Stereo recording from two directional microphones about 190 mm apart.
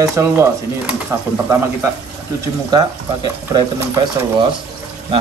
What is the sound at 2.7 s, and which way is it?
Speech, 20° right (ahead or behind).